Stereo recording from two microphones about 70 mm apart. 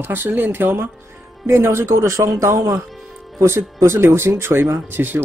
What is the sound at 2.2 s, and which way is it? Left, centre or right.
Speech, right.